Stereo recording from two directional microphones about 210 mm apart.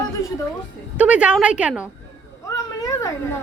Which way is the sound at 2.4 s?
15° left (ahead or behind).